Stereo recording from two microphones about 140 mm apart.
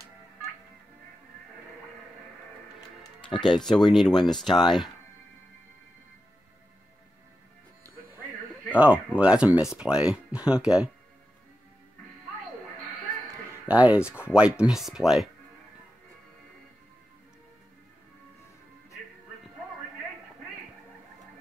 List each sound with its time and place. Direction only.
3.0 s music: 30° left (ahead or behind)
3.4 s speech: 5° left (ahead or behind)
8.6 s speech: 10° right (ahead or behind)
13.5 s speech: 10° right (ahead or behind)